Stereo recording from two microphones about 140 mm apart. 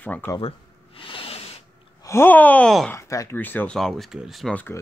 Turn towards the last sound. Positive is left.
turn(degrees=10)  # may be behind; listen again after turning